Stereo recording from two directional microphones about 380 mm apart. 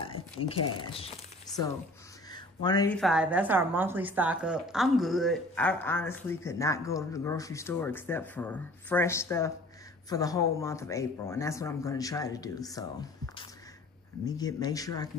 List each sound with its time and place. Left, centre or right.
0.0 s a sound: centre
0.7 s speech: centre
2.3 s a woman's voice: centre
14.2 s speech: centre